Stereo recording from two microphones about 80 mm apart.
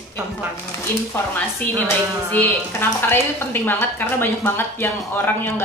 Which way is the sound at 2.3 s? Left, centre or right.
Left.